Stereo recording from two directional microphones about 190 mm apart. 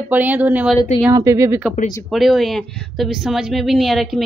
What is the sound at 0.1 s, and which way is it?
Speech, 10° right (ahead or behind).